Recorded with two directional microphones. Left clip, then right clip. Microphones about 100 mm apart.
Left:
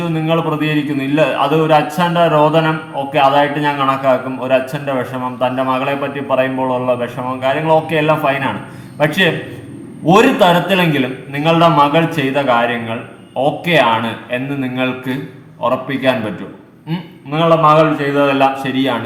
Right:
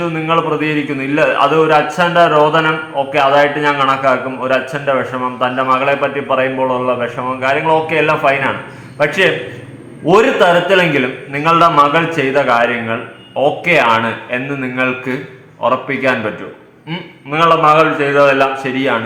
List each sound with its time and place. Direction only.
0.0 s a man's voice: 15° left (ahead or behind)
17.3 s a man's voice: 10° left (ahead or behind)